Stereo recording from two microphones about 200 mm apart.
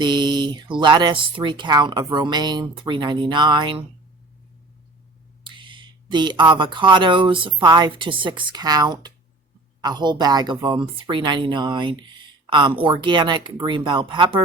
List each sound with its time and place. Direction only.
0.0 s a woman's voice: 25° right (ahead or behind)
5.4 s a woman's voice: 25° right (ahead or behind)